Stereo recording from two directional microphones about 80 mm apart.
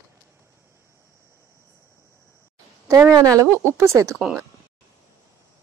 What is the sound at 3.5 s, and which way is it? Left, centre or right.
Speech, right.